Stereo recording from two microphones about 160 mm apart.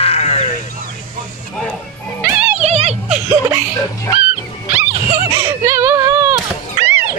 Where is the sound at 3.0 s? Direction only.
10° right (ahead or behind).